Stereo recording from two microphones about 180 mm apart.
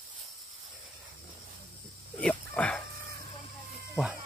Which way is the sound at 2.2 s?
10° left (ahead or behind).